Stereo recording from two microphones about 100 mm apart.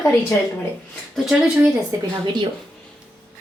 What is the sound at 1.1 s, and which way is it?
Speech, 5° right (ahead or behind).